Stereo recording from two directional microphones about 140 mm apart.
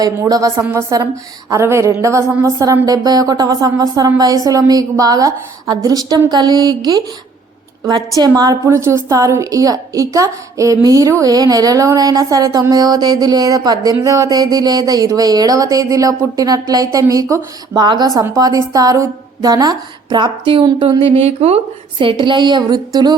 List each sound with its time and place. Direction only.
0.0 s a woman's voice: 25° right (ahead or behind)
8.2 s a woman's voice: 25° right (ahead or behind)